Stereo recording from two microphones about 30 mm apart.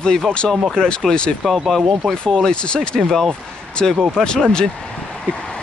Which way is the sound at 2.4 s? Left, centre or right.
Left.